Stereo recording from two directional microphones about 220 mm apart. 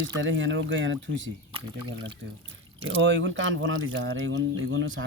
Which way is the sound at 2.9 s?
55° right (ahead or behind).